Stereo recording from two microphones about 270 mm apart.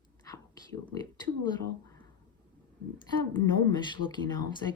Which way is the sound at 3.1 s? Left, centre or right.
Centre.